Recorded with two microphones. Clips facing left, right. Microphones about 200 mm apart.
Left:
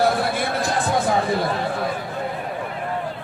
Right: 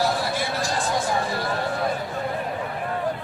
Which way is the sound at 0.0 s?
55° left (ahead or behind).